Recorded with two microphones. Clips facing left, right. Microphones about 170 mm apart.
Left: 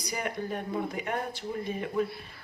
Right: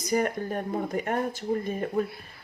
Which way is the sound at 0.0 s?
45° right (ahead or behind).